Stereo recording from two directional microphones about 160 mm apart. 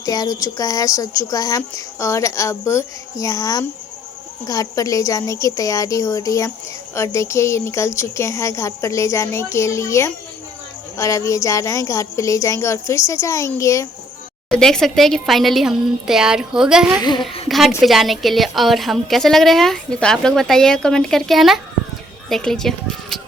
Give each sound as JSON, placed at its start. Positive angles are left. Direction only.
{"t": 0.0, "sound": "a woman's voice", "side_deg": 25}
{"t": 14.5, "sound": "a woman's voice", "side_deg": 5}
{"t": 17.0, "sound": "speech", "side_deg": 30}
{"t": 17.5, "sound": "a sound", "side_deg": 0}
{"t": 17.8, "sound": "a woman's voice", "side_deg": 0}